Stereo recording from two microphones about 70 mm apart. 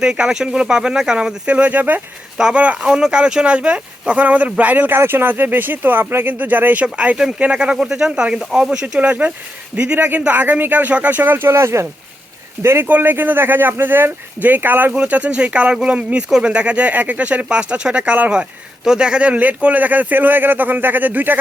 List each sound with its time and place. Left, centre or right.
0.0 s speech: centre
9.0 s speech: right